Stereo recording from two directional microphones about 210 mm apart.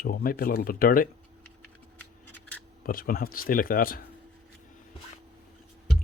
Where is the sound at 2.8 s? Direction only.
45° left (ahead or behind).